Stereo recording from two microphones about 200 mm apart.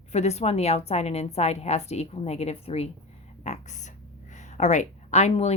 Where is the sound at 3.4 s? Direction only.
35° left (ahead or behind).